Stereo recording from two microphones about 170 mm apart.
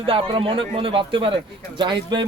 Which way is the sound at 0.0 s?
30° right (ahead or behind).